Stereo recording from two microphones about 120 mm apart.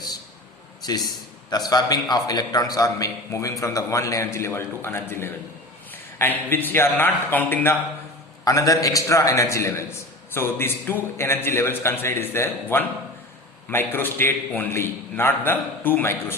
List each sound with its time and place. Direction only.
1.5 s a man's voice: 35° left (ahead or behind); by 7.8 s 15° left (ahead or behind)
8.4 s a man's voice: 30° left (ahead or behind)